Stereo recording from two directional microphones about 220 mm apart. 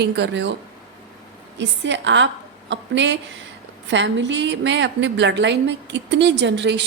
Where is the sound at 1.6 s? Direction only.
55° right (ahead or behind).